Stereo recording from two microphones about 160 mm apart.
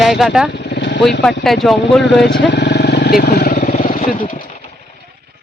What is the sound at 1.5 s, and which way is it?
Speech, centre (ahead or behind).